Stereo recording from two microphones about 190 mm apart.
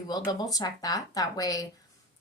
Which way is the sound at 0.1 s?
20° left (ahead or behind).